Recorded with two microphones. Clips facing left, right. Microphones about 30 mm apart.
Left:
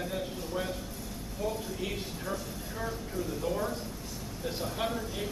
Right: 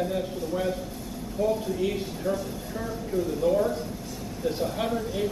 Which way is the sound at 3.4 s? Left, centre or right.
Centre.